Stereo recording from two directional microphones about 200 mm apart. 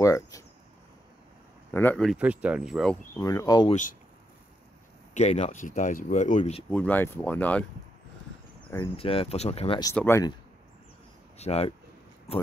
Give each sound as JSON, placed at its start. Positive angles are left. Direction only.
{"t": 0.0, "sound": "speech", "side_deg": 15}
{"t": 1.7, "sound": "speech", "side_deg": 10}
{"t": 2.1, "sound": "speech", "side_deg": -5}
{"t": 3.2, "sound": "speech", "side_deg": 15}
{"t": 5.1, "sound": "speech", "side_deg": 35}
{"t": 6.7, "sound": "speech", "side_deg": 10}
{"t": 8.7, "sound": "speech", "side_deg": 25}
{"t": 9.9, "sound": "speech", "side_deg": 10}
{"t": 11.3, "sound": "speech", "side_deg": 30}